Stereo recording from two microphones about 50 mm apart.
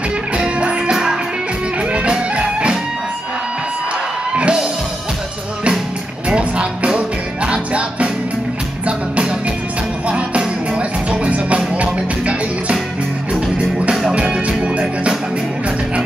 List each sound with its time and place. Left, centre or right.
0.4 s music: right
4.3 s music: right
6.2 s music: right